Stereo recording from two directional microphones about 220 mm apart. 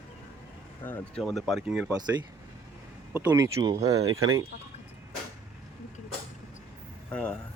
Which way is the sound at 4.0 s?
70° right (ahead or behind).